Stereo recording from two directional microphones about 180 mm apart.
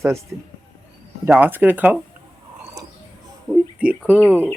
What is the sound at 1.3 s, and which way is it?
Speech, 10° right (ahead or behind).